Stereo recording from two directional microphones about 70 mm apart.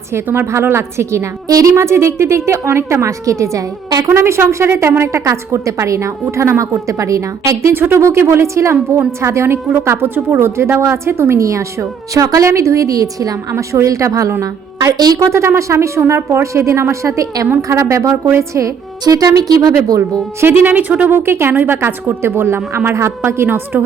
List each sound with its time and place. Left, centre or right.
0.3 s speech: right
1.5 s speech: right
1.7 s a woman's voice: right
4.1 s a woman's voice: right
7.7 s a woman's voice: right
13.5 s a woman's voice: right
14.9 s speech: right
15.3 s a woman's voice: right
19.0 s speech: right
20.4 s speech: right
21.1 s speech: right